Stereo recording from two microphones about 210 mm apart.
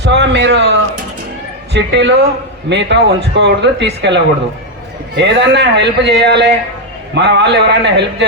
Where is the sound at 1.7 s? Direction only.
55° right (ahead or behind).